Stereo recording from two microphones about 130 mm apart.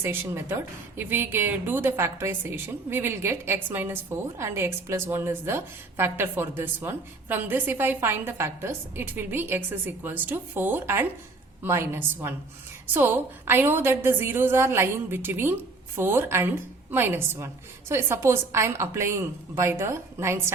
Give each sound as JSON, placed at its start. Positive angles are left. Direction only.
{"t": 0.0, "sound": "a woman's voice", "side_deg": -15}